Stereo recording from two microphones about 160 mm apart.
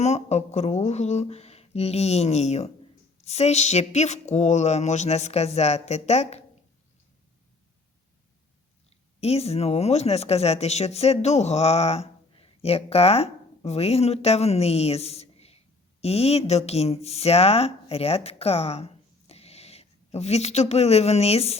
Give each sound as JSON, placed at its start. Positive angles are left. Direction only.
{"t": 0.0, "sound": "speech", "side_deg": 45}
{"t": 9.2, "sound": "speech", "side_deg": 40}